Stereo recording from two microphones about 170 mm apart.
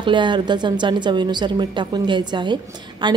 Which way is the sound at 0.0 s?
30° right (ahead or behind).